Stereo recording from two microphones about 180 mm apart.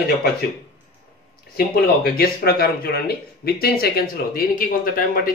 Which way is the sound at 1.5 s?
55° left (ahead or behind).